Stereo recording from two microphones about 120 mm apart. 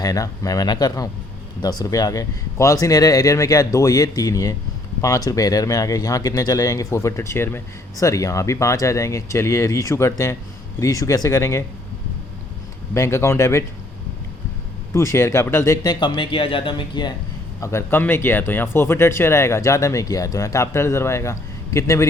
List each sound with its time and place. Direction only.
0.0 s speech: 30° left (ahead or behind)
12.9 s speech: 20° left (ahead or behind)
14.9 s speech: 25° left (ahead or behind); by 17.1 s 40° left (ahead or behind)
17.6 s speech: 25° left (ahead or behind)